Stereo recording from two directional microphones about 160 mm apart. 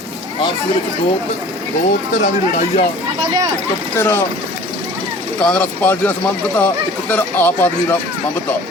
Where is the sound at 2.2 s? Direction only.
45° left (ahead or behind).